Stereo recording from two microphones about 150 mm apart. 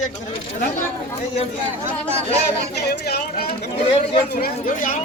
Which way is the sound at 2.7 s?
90° left.